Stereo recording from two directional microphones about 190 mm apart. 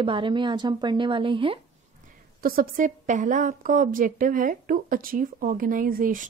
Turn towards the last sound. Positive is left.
turn(degrees=-45)  # may be behind; listen again after turning